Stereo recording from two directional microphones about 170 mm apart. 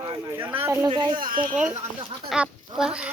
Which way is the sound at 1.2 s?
55° right (ahead or behind).